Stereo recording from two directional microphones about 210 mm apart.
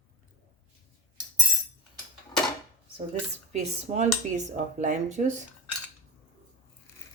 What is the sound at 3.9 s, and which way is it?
Dishes, 35° right (ahead or behind).